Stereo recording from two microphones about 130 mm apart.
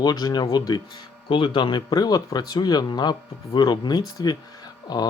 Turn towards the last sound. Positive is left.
turn(degrees=30)  # may be behind; listen again after turning